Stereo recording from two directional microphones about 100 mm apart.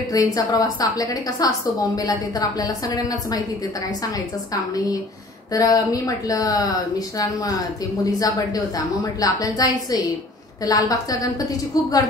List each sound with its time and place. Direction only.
0.1 s a woman's voice: 40° left (ahead or behind)
4.7 s a woman's voice: 35° left (ahead or behind)
8.0 s a woman's voice: 40° left (ahead or behind)